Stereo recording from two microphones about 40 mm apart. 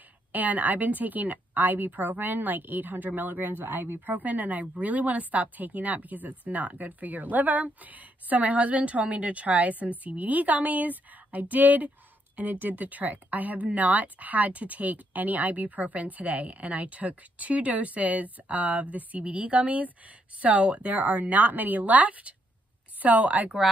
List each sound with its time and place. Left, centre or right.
0.3 s a woman's voice: right
4.3 s speech: right